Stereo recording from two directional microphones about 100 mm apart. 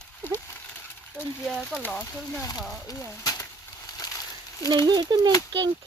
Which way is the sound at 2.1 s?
25° left (ahead or behind).